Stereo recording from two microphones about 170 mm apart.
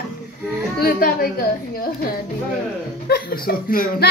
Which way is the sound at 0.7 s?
60° left (ahead or behind).